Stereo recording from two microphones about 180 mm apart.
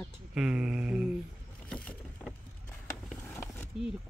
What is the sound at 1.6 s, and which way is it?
Vehicle, 5° left (ahead or behind).